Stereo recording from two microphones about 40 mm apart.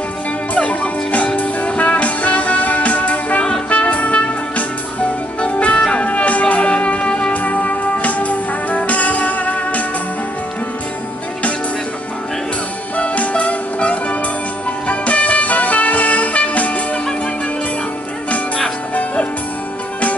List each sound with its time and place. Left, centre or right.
0.6 s music: left
6.0 s music: left
7.3 s music: left
12.9 s music: left